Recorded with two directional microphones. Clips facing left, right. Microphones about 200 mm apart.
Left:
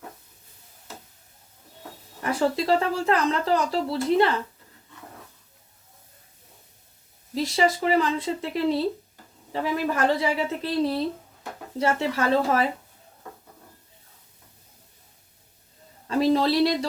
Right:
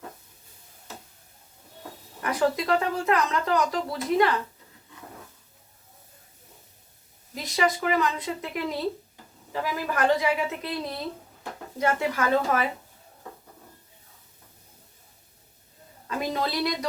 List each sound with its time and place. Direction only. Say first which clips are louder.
2.2 s speech: left 1 dB; 30° left (ahead or behind)
7.3 s a woman's voice: left 3 dB; 30° left (ahead or behind)
16.0 s a sound: left 8 dB; 30° left (ahead or behind)